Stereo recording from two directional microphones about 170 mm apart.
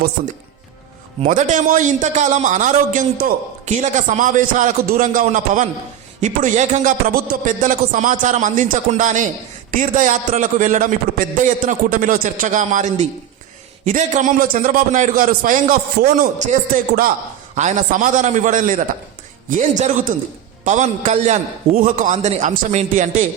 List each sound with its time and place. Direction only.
1.3 s a man's voice: 45° right (ahead or behind)